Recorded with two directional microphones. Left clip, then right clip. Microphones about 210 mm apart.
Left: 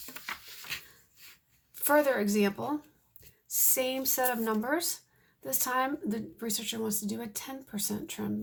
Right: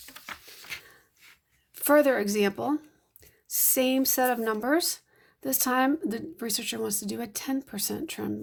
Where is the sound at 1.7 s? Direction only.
40° right (ahead or behind).